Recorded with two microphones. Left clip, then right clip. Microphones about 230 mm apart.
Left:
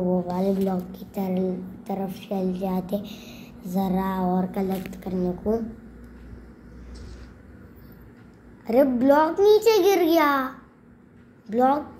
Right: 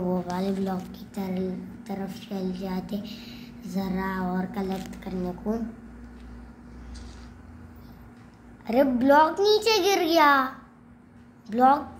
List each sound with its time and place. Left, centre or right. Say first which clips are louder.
0.0 s speech: left 4 dB; right
1.1 s a woman's voice: left 5 dB; centre
8.6 s a child's voice: left 2 dB; centre
11.5 s a child's voice: right 1 dB; centre